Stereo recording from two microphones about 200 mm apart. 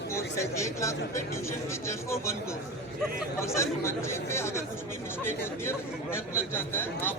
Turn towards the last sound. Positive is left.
turn(degrees=10)  # may be behind; listen again after turning